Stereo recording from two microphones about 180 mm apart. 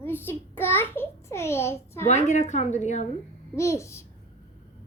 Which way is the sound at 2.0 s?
40° left (ahead or behind).